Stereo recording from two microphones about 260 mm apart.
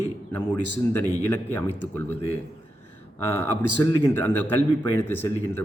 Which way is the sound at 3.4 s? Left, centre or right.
Centre.